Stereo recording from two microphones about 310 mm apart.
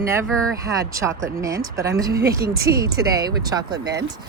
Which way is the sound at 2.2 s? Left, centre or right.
Right.